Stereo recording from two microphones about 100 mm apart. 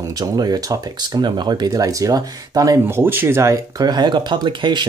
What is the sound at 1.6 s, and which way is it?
Speech, 35° right (ahead or behind).